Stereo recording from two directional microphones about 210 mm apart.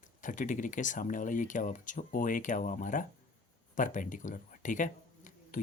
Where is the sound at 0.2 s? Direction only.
35° left (ahead or behind).